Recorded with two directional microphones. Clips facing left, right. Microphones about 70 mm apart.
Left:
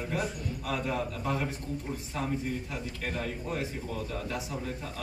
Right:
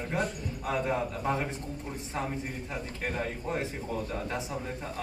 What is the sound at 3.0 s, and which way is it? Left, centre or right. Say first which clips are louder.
Speech: right 2 dB; right.